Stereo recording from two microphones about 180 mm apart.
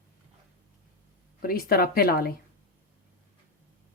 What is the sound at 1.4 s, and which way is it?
Speech, 55° left (ahead or behind).